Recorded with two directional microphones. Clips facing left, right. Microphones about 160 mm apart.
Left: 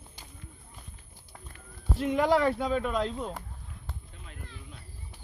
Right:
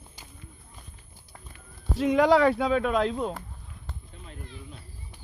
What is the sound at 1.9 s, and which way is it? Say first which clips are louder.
Speech: right 5 dB; 90° right.